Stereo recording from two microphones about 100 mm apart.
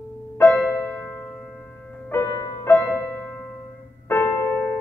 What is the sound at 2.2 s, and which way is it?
Music, 40° left (ahead or behind).